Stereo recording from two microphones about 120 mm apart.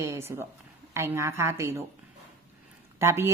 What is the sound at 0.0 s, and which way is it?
A woman's voice, 20° right (ahead or behind).